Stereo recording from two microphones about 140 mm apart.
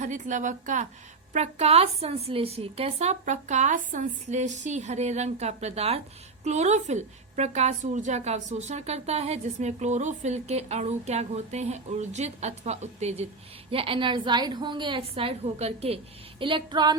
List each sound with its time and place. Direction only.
0.0 s speech: 60° right (ahead or behind)
1.3 s a woman's voice: 55° right (ahead or behind)
16.4 s a woman's voice: 35° right (ahead or behind)